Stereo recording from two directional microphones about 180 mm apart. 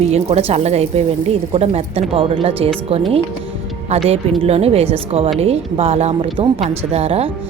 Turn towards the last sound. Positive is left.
turn(degrees=-30)  # may be behind; listen again after turning